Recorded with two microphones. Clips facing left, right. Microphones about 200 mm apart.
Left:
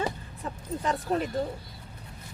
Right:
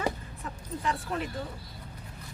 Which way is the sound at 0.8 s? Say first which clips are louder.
Left 4 dB; 35° left (ahead or behind).